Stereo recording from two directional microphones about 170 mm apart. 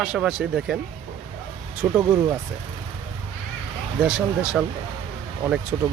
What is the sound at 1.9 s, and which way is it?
Speech, 10° right (ahead or behind).